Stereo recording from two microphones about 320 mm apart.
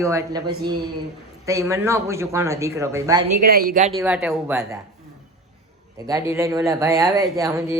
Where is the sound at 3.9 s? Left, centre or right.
Centre.